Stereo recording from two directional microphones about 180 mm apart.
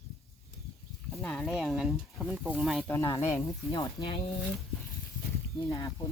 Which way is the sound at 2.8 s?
15° left (ahead or behind).